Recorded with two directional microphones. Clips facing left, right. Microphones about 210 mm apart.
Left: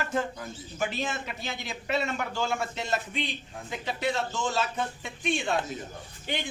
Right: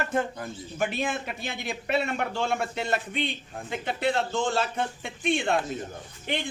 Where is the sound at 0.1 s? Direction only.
55° right (ahead or behind).